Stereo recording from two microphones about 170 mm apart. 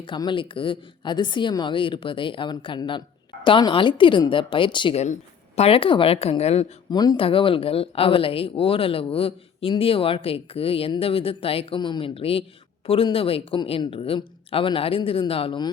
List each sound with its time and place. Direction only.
0.0 s a woman's voice: 30° left (ahead or behind)
6.9 s speech: 25° left (ahead or behind)